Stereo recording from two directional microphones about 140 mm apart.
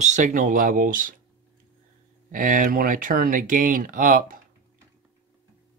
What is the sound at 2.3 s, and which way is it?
Speech, 75° right (ahead or behind).